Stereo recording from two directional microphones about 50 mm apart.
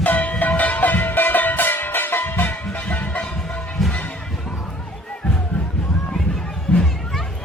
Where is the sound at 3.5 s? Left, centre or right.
Left.